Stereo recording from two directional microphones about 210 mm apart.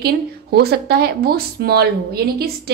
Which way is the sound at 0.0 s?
50° right (ahead or behind).